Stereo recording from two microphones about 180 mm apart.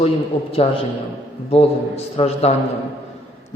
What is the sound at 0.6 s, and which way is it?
A man's voice, 35° left (ahead or behind).